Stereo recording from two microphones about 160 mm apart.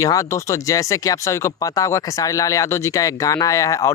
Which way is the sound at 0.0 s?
20° left (ahead or behind).